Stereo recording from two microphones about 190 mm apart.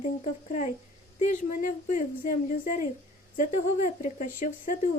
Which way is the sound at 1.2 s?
40° left (ahead or behind).